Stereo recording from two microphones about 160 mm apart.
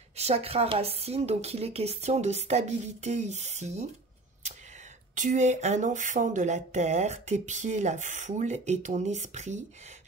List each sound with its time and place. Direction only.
0.2 s a woman's voice: 40° right (ahead or behind)
5.1 s speech: 50° right (ahead or behind)